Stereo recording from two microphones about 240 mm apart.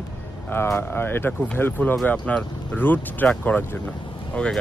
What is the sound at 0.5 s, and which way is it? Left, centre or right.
Speech, centre.